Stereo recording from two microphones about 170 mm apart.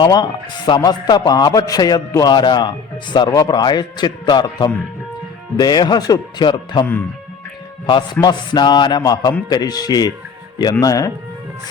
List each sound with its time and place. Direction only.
0.0 s a man's voice: 25° left (ahead or behind)
7.9 s a man's voice: 25° left (ahead or behind)